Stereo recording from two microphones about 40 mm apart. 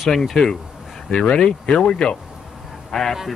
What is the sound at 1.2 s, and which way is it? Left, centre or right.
Speech, left.